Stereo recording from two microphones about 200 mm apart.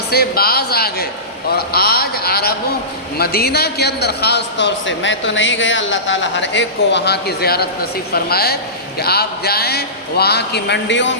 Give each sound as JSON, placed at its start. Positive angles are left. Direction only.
{"t": 0.1, "sound": "a man's voice", "side_deg": 50}